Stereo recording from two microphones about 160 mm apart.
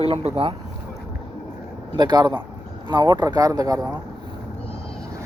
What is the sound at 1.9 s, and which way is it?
Speech, 25° right (ahead or behind).